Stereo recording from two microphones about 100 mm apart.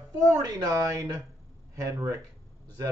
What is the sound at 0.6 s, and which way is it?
Speech, 35° right (ahead or behind).